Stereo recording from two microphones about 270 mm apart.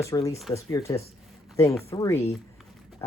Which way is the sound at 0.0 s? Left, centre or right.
Centre.